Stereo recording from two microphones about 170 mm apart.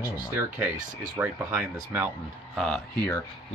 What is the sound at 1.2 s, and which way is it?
Speech, 15° right (ahead or behind).